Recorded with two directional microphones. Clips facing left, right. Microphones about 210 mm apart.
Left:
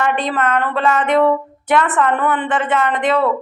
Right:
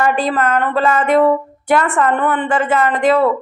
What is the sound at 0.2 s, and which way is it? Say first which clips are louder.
A woman's voice: right 2 dB; centre (ahead or behind).